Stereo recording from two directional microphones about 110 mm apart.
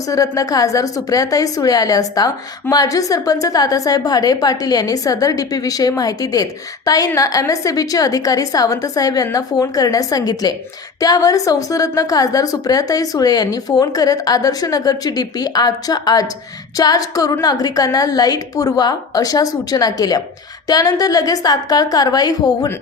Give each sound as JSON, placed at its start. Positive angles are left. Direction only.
{"t": 0.1, "sound": "a woman's voice", "side_deg": 30}